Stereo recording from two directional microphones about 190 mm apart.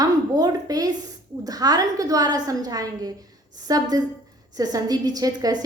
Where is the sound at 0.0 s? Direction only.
20° right (ahead or behind).